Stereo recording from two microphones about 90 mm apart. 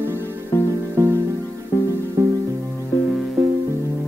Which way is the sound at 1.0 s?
35° right (ahead or behind).